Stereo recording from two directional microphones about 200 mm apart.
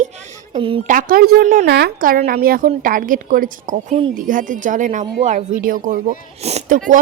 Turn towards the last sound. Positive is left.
turn(degrees=-35)  # may be behind; listen again after turning